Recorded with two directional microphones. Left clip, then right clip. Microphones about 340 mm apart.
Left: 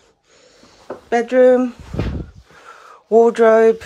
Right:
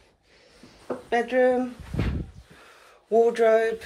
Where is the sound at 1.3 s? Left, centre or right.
Left.